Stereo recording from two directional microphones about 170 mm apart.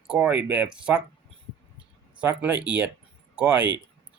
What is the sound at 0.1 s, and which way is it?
Speech, 10° right (ahead or behind).